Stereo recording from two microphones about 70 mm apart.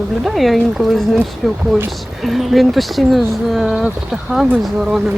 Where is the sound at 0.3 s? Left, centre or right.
Centre.